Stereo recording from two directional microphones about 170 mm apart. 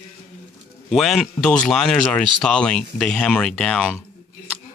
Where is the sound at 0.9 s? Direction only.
Centre (ahead or behind).